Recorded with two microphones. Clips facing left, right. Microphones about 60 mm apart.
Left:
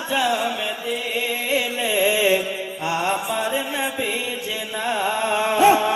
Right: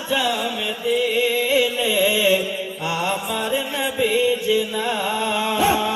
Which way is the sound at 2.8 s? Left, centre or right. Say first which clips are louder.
Left 1 dB; left.